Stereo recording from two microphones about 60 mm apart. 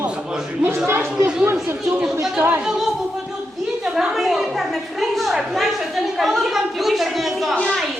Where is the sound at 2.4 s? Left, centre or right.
Right.